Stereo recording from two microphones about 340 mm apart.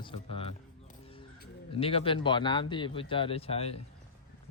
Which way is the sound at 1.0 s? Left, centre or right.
Centre.